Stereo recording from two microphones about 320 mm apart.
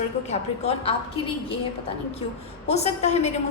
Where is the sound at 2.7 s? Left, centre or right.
Centre.